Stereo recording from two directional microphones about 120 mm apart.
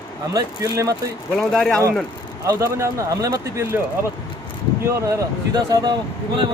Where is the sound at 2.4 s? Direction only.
25° right (ahead or behind).